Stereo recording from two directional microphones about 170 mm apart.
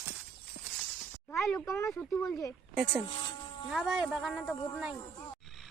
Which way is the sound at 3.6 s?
Centre (ahead or behind).